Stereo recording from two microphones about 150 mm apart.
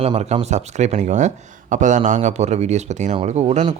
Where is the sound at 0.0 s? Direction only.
45° right (ahead or behind).